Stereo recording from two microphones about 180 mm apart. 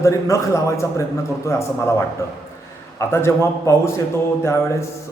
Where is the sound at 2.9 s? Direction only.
15° left (ahead or behind).